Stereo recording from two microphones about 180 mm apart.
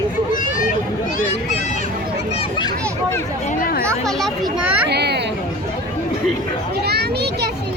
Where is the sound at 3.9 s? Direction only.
Centre (ahead or behind).